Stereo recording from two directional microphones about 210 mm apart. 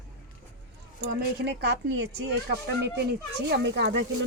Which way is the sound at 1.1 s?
50° right (ahead or behind).